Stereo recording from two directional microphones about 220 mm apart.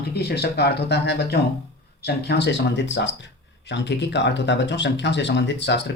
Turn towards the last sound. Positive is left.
turn(degrees=50)  # may be behind; listen again after turning